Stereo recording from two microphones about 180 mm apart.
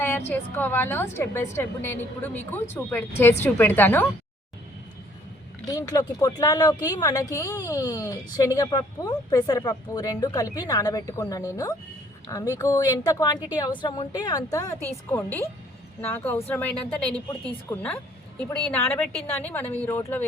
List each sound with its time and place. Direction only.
0.3 s a woman's voice: 10° left (ahead or behind)
5.6 s a woman's voice: 20° left (ahead or behind)